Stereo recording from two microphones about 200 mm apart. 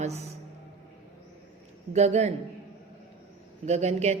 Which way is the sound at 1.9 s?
35° right (ahead or behind).